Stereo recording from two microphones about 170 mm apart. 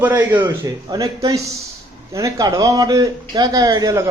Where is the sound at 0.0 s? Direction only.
15° right (ahead or behind).